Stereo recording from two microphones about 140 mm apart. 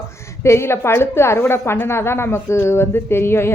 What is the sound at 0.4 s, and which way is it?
A woman's voice, 20° left (ahead or behind).